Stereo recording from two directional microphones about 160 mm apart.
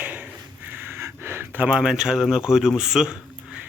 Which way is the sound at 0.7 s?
15° right (ahead or behind).